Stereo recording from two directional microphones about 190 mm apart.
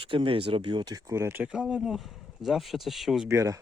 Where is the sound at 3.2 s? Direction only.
15° right (ahead or behind).